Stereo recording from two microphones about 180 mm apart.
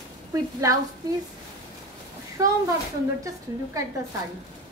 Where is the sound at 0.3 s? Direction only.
15° right (ahead or behind).